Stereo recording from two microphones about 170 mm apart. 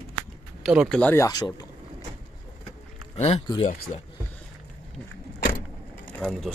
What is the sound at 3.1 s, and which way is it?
Speech, 40° left (ahead or behind).